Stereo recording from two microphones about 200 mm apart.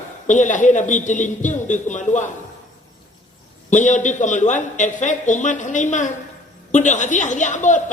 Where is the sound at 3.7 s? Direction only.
40° left (ahead or behind).